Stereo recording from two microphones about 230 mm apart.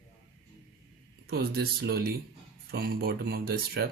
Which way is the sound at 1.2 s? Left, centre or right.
Right.